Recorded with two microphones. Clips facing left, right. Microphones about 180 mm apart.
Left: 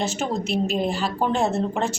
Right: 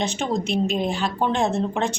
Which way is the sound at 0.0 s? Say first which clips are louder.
Right 1 dB; 5° left (ahead or behind).